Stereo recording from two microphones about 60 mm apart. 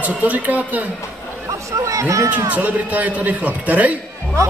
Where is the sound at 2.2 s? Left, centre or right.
Right.